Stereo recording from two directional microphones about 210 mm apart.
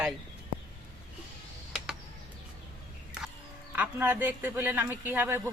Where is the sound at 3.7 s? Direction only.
10° right (ahead or behind).